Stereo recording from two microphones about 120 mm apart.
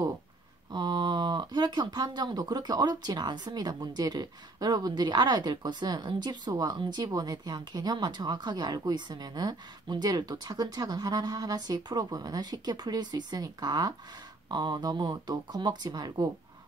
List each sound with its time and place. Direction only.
0.7 s speech: 40° right (ahead or behind)